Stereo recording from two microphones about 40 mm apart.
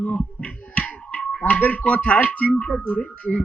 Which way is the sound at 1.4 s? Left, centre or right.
Left.